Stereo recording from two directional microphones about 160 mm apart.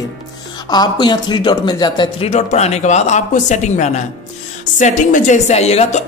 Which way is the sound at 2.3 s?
45° left (ahead or behind).